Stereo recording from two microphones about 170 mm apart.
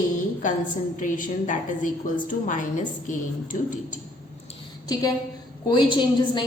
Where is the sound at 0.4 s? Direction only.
50° left (ahead or behind).